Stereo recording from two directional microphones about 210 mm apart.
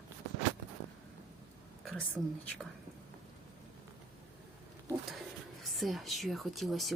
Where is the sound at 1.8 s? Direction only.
5° left (ahead or behind).